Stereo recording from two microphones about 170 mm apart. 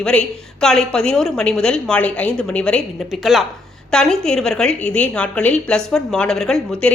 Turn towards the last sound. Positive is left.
turn(degrees=5)  # may be behind; listen again after turning